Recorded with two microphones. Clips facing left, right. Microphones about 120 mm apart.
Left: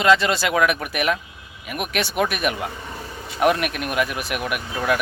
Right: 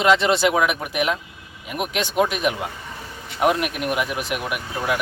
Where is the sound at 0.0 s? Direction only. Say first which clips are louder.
Right 1 dB; 20° right (ahead or behind).